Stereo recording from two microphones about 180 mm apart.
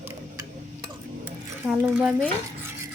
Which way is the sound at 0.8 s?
10° right (ahead or behind).